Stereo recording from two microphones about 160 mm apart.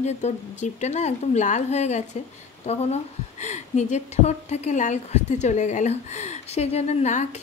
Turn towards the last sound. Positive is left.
turn(degrees=45)  # may be behind; listen again after turning